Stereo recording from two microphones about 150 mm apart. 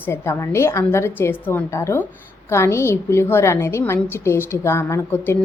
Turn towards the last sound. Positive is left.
turn(degrees=15)  # may be behind; listen again after turning